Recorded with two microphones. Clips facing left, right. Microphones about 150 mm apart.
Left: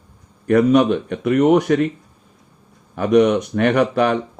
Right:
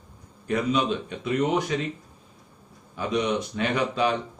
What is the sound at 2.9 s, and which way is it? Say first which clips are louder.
Speech: left 11 dB; 70° left (ahead or behind).